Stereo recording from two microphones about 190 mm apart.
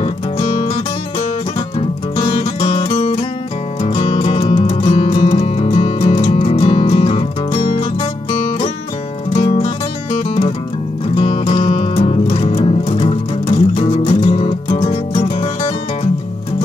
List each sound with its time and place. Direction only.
0.0 s music: 30° left (ahead or behind)
1.8 s music: 30° left (ahead or behind)
11.1 s music: 30° left (ahead or behind)